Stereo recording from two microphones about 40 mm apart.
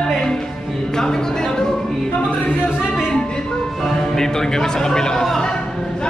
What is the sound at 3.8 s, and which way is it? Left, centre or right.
Speech, centre.